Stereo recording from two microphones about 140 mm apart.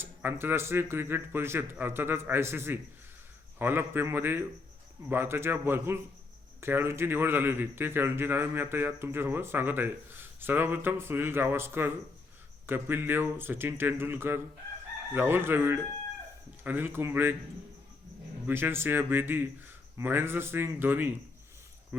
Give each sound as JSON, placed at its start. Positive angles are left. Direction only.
{"t": 0.0, "sound": "a man's voice", "side_deg": -15}
{"t": 18.4, "sound": "a man's voice", "side_deg": -15}